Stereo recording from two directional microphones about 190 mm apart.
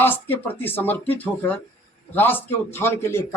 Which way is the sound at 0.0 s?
10° left (ahead or behind).